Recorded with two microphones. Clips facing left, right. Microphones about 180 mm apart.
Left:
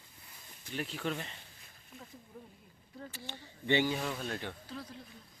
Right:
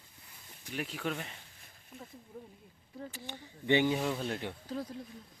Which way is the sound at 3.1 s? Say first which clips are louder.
Right 2 dB; 15° right (ahead or behind).